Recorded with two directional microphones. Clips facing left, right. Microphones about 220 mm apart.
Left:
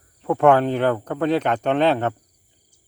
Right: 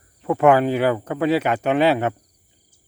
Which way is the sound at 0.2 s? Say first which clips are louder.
Even; 5° right (ahead or behind).